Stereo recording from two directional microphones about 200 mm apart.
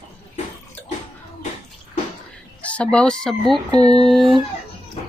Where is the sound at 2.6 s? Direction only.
5° left (ahead or behind).